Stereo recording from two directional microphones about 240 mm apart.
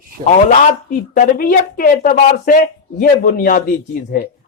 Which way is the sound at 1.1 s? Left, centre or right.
Left.